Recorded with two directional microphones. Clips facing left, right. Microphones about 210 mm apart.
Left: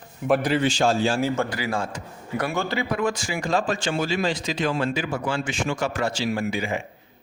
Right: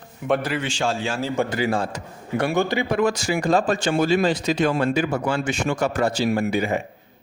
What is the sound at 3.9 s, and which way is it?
A man's voice, 60° right (ahead or behind).